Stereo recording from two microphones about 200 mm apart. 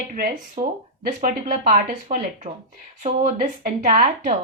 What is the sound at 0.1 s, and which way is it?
A woman's voice, 45° right (ahead or behind).